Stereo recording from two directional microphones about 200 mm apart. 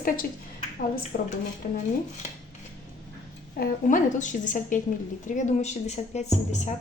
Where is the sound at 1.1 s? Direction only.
45° left (ahead or behind).